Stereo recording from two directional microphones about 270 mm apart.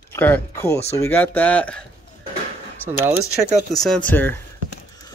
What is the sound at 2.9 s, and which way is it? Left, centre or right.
Speech, centre.